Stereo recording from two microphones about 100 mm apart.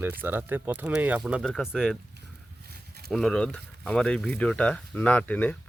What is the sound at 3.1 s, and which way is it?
Speech, 5° left (ahead or behind).